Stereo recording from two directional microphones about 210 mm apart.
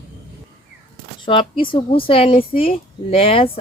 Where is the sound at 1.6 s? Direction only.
25° left (ahead or behind).